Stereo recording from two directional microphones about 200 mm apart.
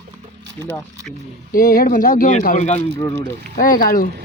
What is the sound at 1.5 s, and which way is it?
Speech, 45° left (ahead or behind).